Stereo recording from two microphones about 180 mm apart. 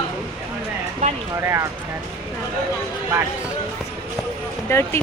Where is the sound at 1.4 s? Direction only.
15° right (ahead or behind).